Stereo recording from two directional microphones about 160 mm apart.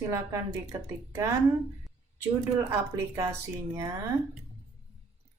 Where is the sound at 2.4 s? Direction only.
15° right (ahead or behind).